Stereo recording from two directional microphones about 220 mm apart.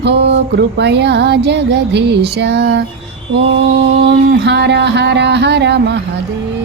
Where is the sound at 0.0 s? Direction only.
50° right (ahead or behind).